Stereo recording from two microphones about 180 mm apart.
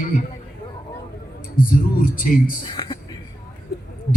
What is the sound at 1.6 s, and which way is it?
Speech, 50° left (ahead or behind).